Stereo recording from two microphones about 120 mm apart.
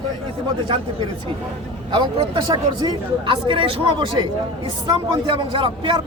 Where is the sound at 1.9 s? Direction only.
40° right (ahead or behind).